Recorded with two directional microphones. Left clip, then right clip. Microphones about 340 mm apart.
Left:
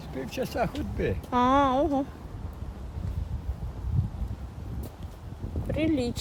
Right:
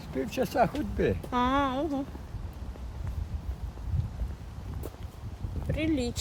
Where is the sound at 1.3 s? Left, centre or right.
Centre.